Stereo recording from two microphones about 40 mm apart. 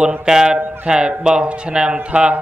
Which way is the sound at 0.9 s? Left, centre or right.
Right.